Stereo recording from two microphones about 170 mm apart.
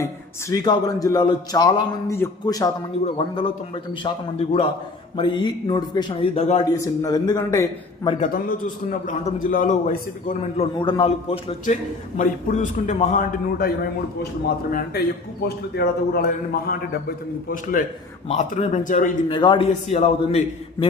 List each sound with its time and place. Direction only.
0.5 s a man's voice: 25° left (ahead or behind)
4.0 s a man's voice: 35° left (ahead or behind)
6.8 s a man's voice: 20° left (ahead or behind)
8.2 s a man's voice: 55° left (ahead or behind)
10.8 s a man's voice: 30° left (ahead or behind); by 13.2 s 45° left (ahead or behind)
14.7 s speech: 55° left (ahead or behind)
15.4 s a man's voice: 75° left (ahead or behind)
17.5 s a man's voice: 50° left (ahead or behind)
19.3 s a man's voice: 30° left (ahead or behind)
19.9 s a man's voice: 40° left (ahead or behind)